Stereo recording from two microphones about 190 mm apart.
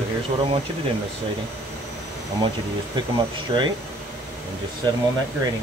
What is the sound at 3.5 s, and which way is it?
Speech, 25° right (ahead or behind).